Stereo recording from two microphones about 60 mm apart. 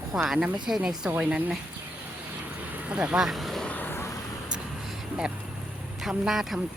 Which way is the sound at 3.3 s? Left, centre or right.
Centre.